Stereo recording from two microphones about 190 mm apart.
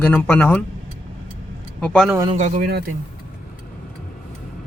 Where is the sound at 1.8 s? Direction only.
5° left (ahead or behind).